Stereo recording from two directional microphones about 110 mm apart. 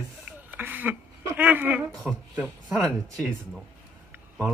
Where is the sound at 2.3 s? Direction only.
10° right (ahead or behind).